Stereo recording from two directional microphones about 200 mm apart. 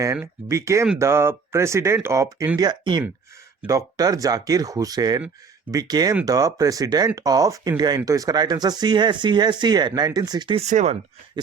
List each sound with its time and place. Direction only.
0.0 s speech: 15° right (ahead or behind)
10.7 s speech: 35° right (ahead or behind)